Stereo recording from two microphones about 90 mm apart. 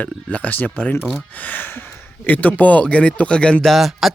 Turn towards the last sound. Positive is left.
turn(degrees=0)  # may be behind; listen again after turning